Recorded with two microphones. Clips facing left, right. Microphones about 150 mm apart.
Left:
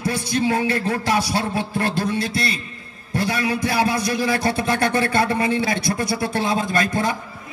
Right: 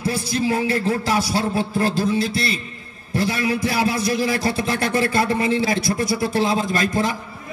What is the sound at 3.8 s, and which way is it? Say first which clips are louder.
A man's voice: right 1 dB; 30° right (ahead or behind).